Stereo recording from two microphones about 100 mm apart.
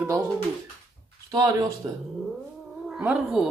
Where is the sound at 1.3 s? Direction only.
40° right (ahead or behind).